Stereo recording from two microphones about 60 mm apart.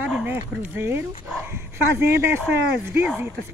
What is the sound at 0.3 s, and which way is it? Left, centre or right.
Speech, right.